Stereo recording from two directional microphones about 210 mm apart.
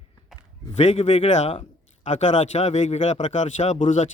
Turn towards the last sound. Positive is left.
turn(degrees=35)  # may be behind; listen again after turning